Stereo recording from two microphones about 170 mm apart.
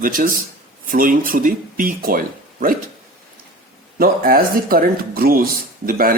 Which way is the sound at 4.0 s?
60° right (ahead or behind).